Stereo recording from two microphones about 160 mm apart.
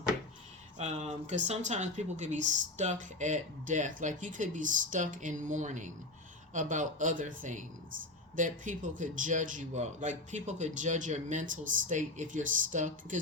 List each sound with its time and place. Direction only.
0.8 s speech: 45° right (ahead or behind)